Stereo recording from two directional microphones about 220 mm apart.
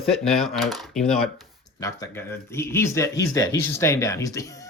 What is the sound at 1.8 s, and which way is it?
Speech, 10° left (ahead or behind).